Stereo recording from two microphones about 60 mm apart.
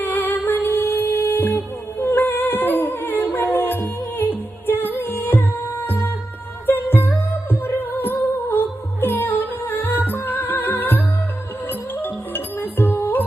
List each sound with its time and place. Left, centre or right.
0.0 s music: left